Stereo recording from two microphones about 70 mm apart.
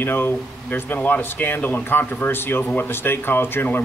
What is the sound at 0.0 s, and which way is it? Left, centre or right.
Speech, left.